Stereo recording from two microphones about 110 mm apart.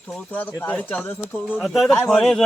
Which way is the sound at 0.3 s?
15° left (ahead or behind).